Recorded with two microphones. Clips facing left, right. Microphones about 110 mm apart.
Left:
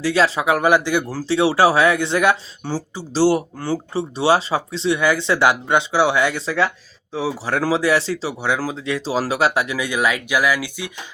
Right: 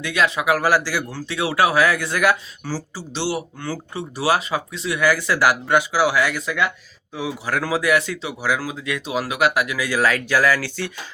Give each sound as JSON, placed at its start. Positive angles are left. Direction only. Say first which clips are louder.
{"t": 0.0, "sound": "speech", "louder": "left 3 dB", "side_deg": 30}
{"t": 3.1, "sound": "speech", "louder": "left 9 dB", "side_deg": 40}
{"t": 3.7, "sound": "speech", "louder": "left 8 dB", "side_deg": 30}